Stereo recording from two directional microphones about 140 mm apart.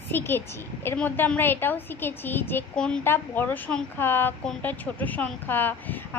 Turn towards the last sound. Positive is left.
turn(degrees=15)  # may be behind; listen again after turning